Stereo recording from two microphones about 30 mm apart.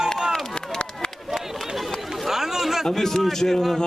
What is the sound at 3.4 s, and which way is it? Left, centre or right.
Speech, centre.